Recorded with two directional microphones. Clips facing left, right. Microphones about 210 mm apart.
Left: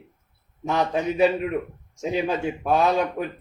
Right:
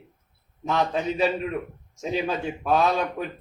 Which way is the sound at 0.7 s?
15° left (ahead or behind).